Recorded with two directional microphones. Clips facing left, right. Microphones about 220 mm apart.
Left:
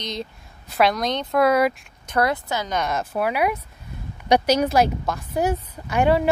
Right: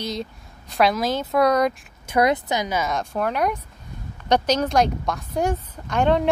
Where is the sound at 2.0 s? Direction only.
15° right (ahead or behind).